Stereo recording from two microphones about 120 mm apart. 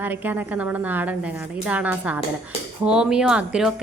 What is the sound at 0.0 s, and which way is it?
A woman's voice, 15° right (ahead or behind).